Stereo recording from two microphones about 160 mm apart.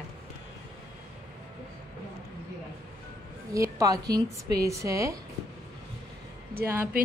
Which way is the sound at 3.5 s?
20° right (ahead or behind).